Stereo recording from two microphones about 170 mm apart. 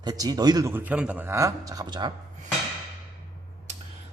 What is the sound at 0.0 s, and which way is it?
Speech, 25° right (ahead or behind).